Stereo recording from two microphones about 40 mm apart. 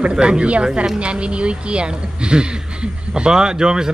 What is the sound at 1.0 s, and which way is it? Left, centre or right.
A woman's voice, right.